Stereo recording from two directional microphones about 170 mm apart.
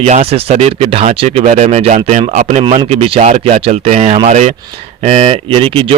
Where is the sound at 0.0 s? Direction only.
35° right (ahead or behind).